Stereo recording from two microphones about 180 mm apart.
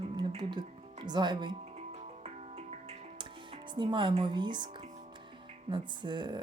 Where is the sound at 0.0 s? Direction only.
30° right (ahead or behind).